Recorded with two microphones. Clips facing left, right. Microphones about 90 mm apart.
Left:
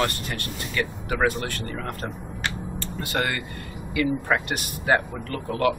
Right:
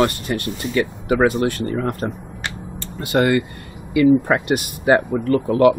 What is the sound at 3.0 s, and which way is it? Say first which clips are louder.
Speech: right 10 dB; 20° right (ahead or behind).